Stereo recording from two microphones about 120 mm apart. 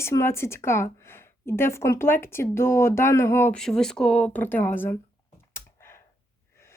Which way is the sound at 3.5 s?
5° left (ahead or behind).